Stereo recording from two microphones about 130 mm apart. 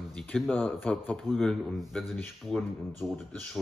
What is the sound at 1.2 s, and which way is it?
Speech, centre (ahead or behind).